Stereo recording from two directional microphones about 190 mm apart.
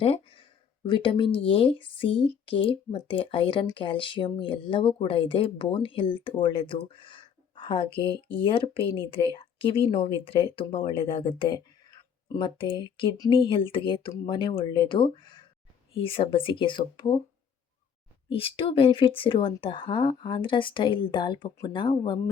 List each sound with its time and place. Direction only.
0.0 s speech: 30° left (ahead or behind)
18.3 s speech: 30° left (ahead or behind)